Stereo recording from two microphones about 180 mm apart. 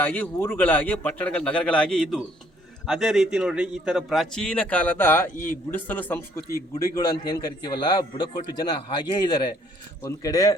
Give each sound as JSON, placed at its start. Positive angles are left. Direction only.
{"t": 0.0, "sound": "a man's voice", "side_deg": 10}